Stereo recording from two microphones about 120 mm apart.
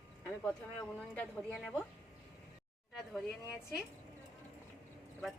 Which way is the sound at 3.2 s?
5° right (ahead or behind).